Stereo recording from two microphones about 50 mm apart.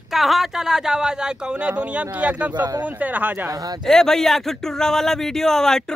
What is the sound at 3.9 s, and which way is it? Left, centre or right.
Speech, centre.